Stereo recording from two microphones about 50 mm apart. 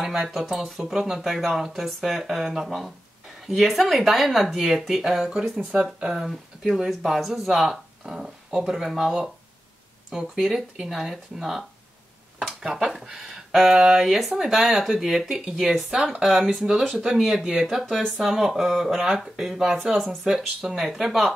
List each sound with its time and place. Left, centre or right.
0.0 s speech: centre
5.6 s speech: right; by 18.9 s centre
18.9 s speech: centre